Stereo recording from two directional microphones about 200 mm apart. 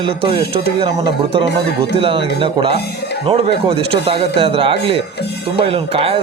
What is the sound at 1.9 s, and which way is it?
Speech, 25° right (ahead or behind).